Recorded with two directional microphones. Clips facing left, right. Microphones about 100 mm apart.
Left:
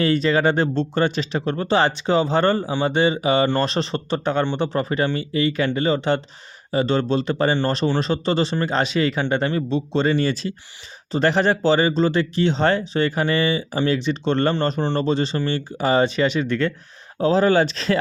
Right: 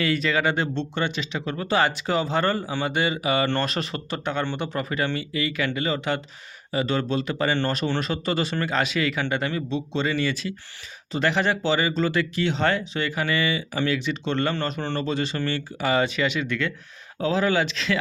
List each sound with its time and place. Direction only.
0.0 s speech: 35° left (ahead or behind)